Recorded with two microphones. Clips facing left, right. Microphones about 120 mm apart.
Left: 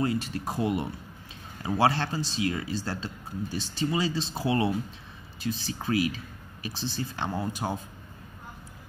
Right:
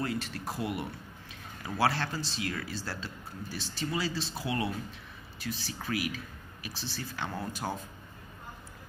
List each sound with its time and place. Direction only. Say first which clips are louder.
0.0 s speech: left 6 dB; 20° left (ahead or behind)